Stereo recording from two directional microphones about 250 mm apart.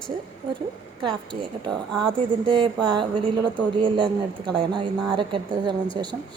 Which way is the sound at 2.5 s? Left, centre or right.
Centre.